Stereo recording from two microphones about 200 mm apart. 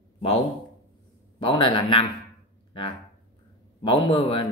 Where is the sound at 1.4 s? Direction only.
25° left (ahead or behind).